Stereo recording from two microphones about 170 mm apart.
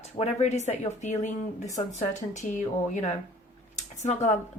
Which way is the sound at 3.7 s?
40° left (ahead or behind).